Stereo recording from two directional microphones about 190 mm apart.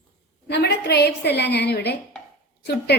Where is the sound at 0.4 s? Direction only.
60° left (ahead or behind).